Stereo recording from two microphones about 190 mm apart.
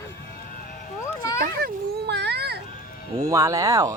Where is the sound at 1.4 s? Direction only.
55° right (ahead or behind).